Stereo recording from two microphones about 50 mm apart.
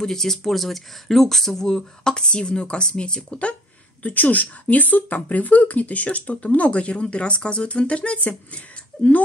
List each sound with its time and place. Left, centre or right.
0.0 s speech: centre
4.0 s speech: left